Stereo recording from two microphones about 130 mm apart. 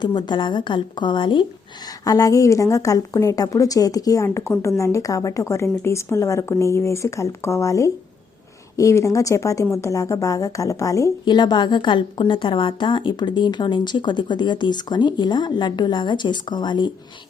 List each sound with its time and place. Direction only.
0.0 s a woman's voice: 35° left (ahead or behind)